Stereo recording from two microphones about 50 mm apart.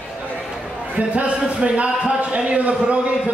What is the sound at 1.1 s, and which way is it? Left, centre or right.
A man's voice, right.